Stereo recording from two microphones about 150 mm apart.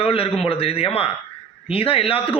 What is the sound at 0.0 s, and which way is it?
Speech, 40° left (ahead or behind).